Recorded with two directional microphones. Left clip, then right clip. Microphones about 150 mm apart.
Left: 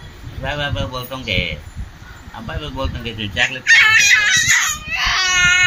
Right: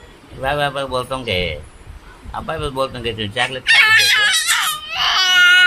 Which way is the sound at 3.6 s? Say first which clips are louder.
Left 1 dB; 25° right (ahead or behind).